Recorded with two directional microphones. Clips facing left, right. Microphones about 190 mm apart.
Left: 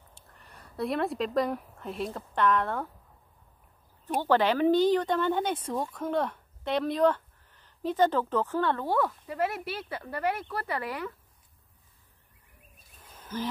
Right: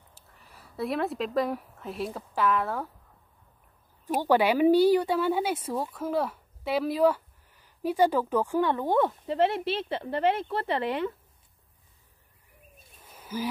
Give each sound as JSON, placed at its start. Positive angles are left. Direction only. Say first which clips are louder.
{"t": 0.1, "sound": "speech", "louder": "left 1 dB", "side_deg": -5}
{"t": 4.0, "sound": "a woman's voice", "louder": "right 2 dB", "side_deg": -10}
{"t": 12.7, "sound": "a sound", "louder": "right 1 dB", "side_deg": -10}